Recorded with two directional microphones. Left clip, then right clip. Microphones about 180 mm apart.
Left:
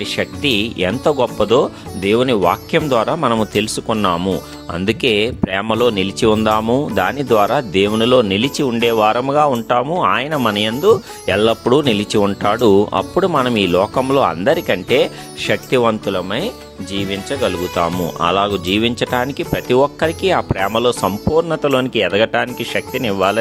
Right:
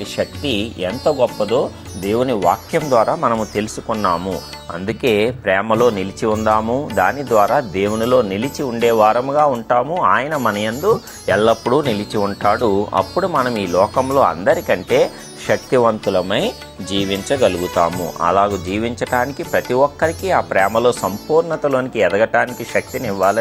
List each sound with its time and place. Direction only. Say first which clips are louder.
0.2 s speech: left 2 dB; 30° left (ahead or behind)
3.2 s speech: left 2 dB; 50° left (ahead or behind)
7.2 s speech: even; 60° left (ahead or behind)
8.5 s speech: right 3 dB; 70° left (ahead or behind); by 13.5 s 45° left (ahead or behind)
13.7 s speech: even; 55° left (ahead or behind)
14.9 s speech: left 1 dB; 40° left (ahead or behind)
16.0 s speech: right 3 dB; 5° left (ahead or behind)
18.2 s speech: right 1 dB; 45° left (ahead or behind)
20.7 s speech: even; 75° left (ahead or behind)
21.3 s speech: even; 50° left (ahead or behind)